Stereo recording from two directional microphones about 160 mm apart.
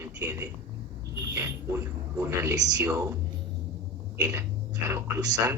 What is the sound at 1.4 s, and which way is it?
A man's voice, 15° right (ahead or behind).